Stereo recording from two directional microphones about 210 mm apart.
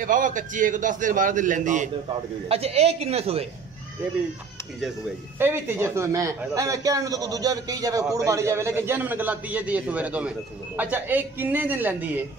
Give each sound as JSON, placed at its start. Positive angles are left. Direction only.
{"t": 0.0, "sound": "a man's voice", "side_deg": -40}
{"t": 5.4, "sound": "a man's voice", "side_deg": -10}